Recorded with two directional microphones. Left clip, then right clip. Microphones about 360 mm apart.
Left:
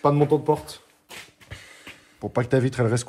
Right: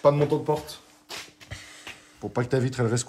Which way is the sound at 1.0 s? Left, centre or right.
Centre.